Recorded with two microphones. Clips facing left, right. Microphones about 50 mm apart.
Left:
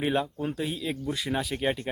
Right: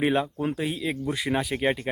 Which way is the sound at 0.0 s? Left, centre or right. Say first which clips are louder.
Right 3 dB; centre.